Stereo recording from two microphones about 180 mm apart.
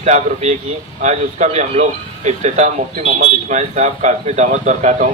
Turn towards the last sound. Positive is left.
turn(degrees=-40)  # may be behind; listen again after turning